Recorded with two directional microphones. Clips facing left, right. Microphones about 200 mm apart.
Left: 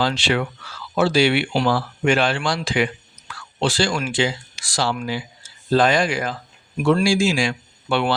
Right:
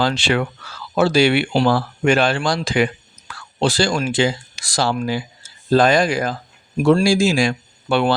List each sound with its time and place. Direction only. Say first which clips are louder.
0.0 s speech: right 2 dB; 45° right (ahead or behind)